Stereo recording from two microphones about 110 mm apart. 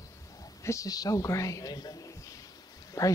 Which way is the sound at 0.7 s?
30° left (ahead or behind).